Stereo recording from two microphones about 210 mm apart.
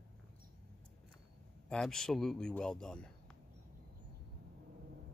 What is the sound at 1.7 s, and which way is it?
Speech, 5° left (ahead or behind).